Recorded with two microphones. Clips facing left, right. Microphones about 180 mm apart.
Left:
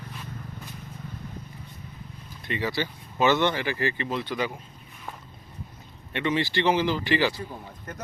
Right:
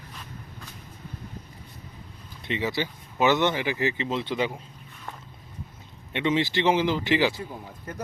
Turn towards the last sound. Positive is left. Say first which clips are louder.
# right 1 dB
turn(degrees=-20)  # may be behind; listen again after turning